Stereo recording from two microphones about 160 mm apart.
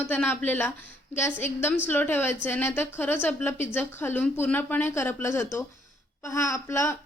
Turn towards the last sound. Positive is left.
turn(degrees=15)  # may be behind; listen again after turning